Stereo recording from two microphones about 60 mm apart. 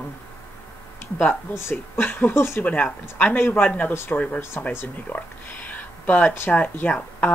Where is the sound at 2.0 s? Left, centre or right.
Left.